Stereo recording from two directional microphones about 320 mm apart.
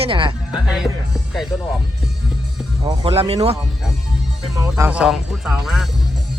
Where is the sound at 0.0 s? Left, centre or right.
Centre.